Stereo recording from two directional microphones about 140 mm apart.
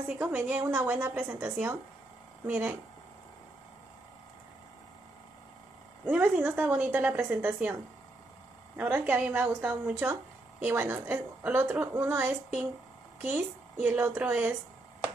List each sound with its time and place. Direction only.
0.2 s a woman's voice: 10° right (ahead or behind)
6.0 s a woman's voice: 10° right (ahead or behind)
8.7 s a woman's voice: 10° right (ahead or behind)